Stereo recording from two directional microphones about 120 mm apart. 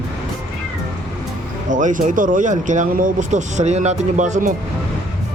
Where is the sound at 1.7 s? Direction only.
90° right.